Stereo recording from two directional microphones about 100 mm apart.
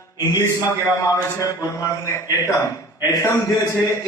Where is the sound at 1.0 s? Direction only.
35° left (ahead or behind).